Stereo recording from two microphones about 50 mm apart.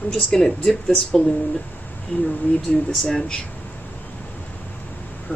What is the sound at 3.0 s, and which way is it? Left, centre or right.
Speech, centre.